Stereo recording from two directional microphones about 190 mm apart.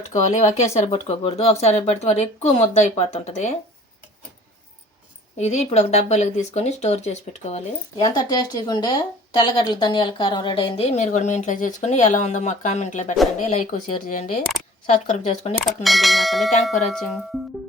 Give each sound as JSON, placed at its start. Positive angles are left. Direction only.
{"t": 0.1, "sound": "speech", "side_deg": 35}
{"t": 5.4, "sound": "speech", "side_deg": 35}
{"t": 7.9, "sound": "speech", "side_deg": 20}
{"t": 15.6, "sound": "speech", "side_deg": 0}